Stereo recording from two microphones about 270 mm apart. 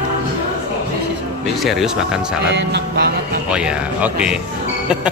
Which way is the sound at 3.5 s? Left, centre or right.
Centre.